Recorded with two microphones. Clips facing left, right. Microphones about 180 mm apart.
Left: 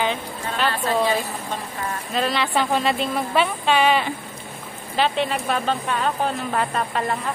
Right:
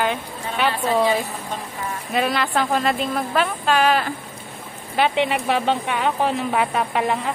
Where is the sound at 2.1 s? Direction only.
5° right (ahead or behind).